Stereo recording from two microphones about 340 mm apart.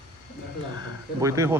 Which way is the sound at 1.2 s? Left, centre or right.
Centre.